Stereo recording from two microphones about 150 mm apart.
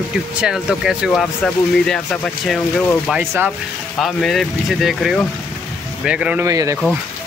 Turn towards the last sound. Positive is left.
turn(degrees=-20)  # may be behind; listen again after turning